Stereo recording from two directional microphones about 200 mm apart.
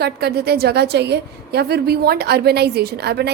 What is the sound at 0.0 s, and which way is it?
A woman's voice, 55° right (ahead or behind).